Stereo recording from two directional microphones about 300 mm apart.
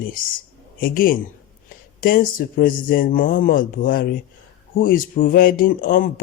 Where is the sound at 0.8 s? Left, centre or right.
Left.